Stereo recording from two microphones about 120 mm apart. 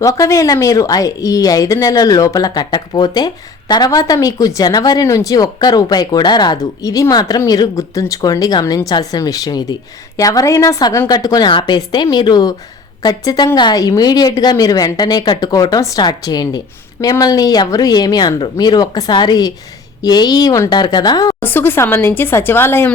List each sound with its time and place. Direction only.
0.0 s a woman's voice: 25° left (ahead or behind)
21.4 s a woman's voice: 15° left (ahead or behind)